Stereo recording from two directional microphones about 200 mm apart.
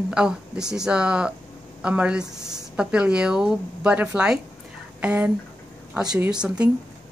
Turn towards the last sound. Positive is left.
turn(degrees=-5)  # may be behind; listen again after turning